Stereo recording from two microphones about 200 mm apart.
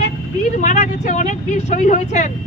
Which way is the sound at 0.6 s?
35° left (ahead or behind).